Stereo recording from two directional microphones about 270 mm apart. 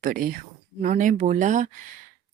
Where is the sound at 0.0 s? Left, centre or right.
Right.